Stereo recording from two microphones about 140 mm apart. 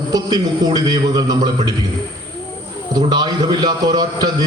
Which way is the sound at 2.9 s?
30° right (ahead or behind).